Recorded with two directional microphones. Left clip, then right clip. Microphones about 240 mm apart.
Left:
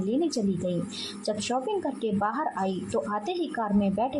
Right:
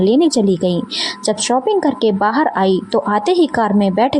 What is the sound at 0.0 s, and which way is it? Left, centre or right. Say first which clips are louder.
A woman's voice: right 15 dB; right.